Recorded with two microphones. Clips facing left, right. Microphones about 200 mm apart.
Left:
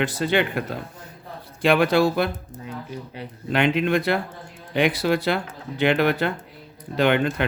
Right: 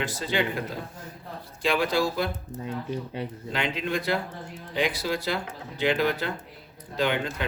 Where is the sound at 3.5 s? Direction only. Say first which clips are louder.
Left 9 dB; 65° left (ahead or behind).